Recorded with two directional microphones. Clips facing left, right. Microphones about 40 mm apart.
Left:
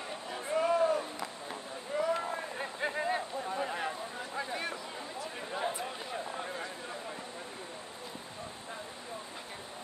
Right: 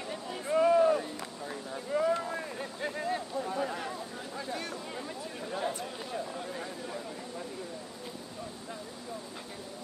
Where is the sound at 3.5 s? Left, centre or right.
Centre.